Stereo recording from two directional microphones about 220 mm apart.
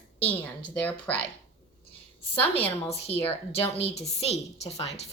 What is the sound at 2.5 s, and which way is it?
A woman's voice, 25° left (ahead or behind).